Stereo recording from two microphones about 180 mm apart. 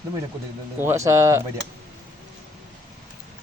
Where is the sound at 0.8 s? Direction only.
15° right (ahead or behind).